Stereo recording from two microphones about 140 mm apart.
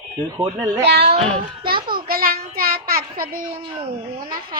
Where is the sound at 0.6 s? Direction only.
25° right (ahead or behind).